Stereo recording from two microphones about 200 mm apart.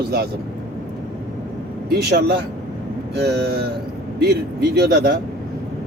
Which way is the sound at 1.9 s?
50° right (ahead or behind).